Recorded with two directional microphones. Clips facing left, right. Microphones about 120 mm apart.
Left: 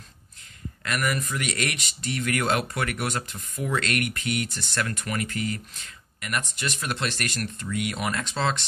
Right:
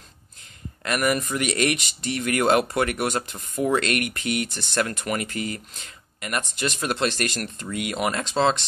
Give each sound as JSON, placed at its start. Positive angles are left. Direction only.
{"t": 0.8, "sound": "speech", "side_deg": -25}